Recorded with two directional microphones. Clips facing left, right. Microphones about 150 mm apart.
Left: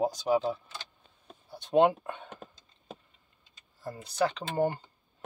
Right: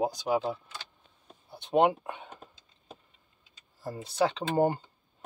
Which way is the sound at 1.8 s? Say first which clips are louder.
Left 1 dB; 10° right (ahead or behind).